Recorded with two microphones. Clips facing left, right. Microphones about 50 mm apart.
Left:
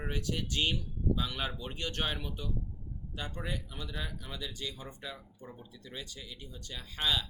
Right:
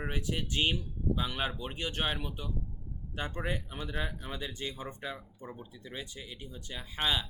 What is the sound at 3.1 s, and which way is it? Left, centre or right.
Speech, right.